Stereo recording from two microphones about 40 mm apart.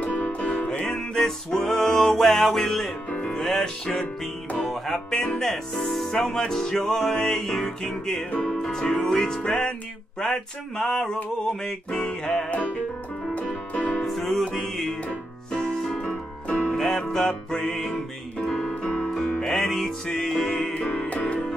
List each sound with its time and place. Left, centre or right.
0.0 s music: left
0.8 s music: centre
3.1 s music: left
3.3 s music: centre
10.2 s music: centre
13.3 s music: left
14.0 s music: centre
16.0 s music: left
16.7 s music: centre
18.6 s music: left
19.0 s music: centre